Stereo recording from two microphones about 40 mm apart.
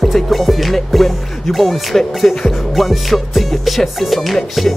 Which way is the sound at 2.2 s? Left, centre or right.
Centre.